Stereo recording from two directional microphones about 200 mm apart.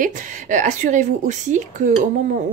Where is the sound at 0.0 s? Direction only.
40° right (ahead or behind).